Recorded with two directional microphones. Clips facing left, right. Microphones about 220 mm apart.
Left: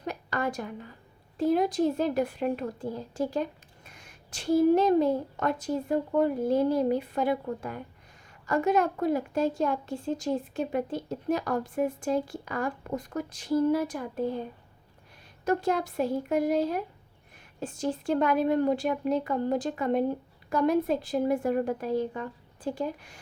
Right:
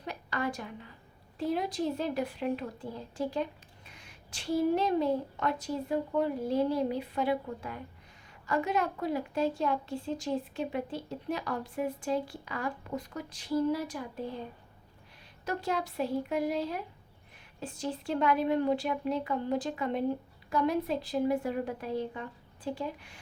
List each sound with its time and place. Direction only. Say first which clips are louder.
0.0 s a sound: left 3 dB; 45° left (ahead or behind)
1.4 s a woman's voice: left 7 dB; 45° left (ahead or behind)
15.4 s a woman's voice: left 6 dB; 50° left (ahead or behind)